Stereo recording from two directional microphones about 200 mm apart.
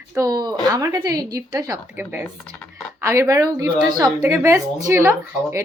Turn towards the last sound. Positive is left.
turn(degrees=-15)  # may be behind; listen again after turning